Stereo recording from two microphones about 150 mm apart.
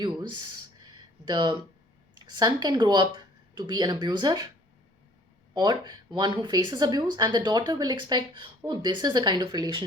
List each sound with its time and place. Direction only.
0.0 s speech: 30° right (ahead or behind)
0.9 s a sound: 30° right (ahead or behind)
2.4 s speech: 30° right (ahead or behind)
5.5 s speech: 30° right (ahead or behind)